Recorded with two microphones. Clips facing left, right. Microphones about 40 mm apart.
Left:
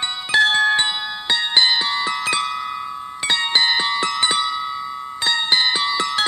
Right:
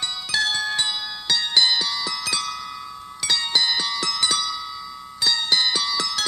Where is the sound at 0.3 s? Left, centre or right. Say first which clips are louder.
Left 9 dB; left.